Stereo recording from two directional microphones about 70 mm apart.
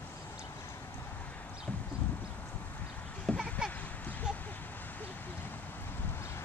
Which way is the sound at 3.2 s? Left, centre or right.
Centre.